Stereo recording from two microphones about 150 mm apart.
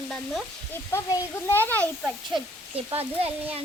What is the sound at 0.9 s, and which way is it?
Speech, 20° left (ahead or behind).